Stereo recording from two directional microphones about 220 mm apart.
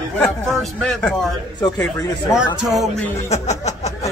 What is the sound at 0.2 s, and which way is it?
Speech, centre (ahead or behind).